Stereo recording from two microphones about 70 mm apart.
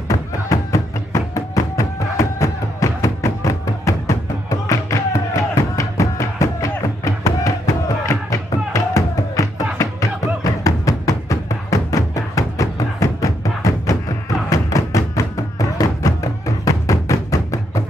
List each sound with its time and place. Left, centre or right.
0.1 s music: left